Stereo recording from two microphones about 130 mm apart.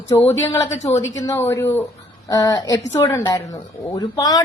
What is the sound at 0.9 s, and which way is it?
A woman's voice, 25° left (ahead or behind).